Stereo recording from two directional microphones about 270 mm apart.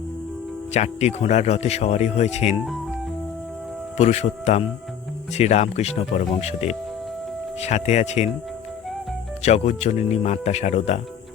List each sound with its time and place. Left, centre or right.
0.7 s speech: left
3.9 s speech: left
9.4 s speech: left